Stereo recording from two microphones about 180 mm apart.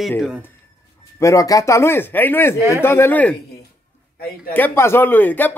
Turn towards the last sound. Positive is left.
turn(degrees=10)  # may be behind; listen again after turning